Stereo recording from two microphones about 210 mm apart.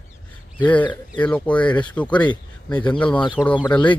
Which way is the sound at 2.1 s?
20° left (ahead or behind).